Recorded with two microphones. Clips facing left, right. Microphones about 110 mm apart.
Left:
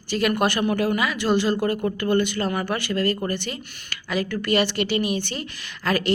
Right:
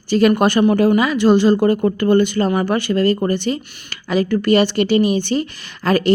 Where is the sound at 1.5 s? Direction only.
40° right (ahead or behind).